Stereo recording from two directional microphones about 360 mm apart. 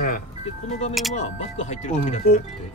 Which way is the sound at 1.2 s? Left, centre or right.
Centre.